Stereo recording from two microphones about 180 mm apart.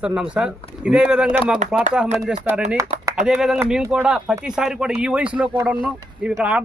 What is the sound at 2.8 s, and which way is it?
Speech, 15° right (ahead or behind).